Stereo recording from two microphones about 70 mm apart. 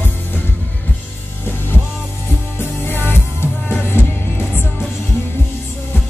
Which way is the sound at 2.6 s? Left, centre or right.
Left.